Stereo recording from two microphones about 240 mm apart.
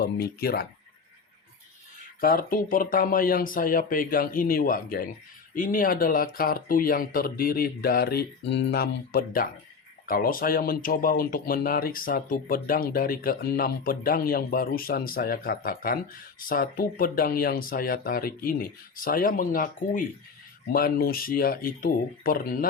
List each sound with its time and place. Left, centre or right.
0.0 s speech: left
2.2 s speech: left